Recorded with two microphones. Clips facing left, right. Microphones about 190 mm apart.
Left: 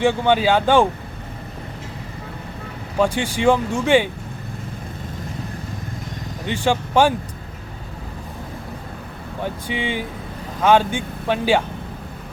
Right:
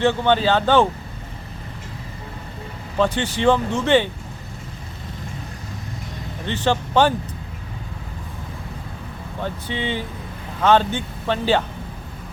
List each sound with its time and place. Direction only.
0.0 s speech: 10° left (ahead or behind)
3.0 s speech: 10° left (ahead or behind)
6.4 s speech: 10° left (ahead or behind)
9.4 s speech: 10° left (ahead or behind)